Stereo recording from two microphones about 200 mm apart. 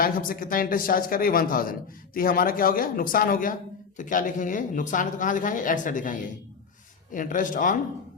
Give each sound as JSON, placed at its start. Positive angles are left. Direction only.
{"t": 0.0, "sound": "speech", "side_deg": 45}